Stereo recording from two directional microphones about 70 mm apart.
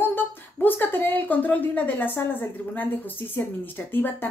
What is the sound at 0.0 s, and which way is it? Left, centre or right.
Speech, left.